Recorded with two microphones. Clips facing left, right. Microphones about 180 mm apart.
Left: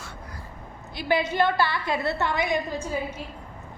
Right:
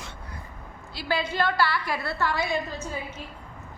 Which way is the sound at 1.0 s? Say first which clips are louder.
Left 4 dB; 20° left (ahead or behind).